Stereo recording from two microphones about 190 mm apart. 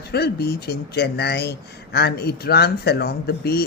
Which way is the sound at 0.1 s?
55° left (ahead or behind).